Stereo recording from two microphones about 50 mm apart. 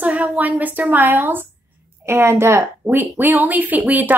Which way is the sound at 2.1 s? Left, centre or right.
Right.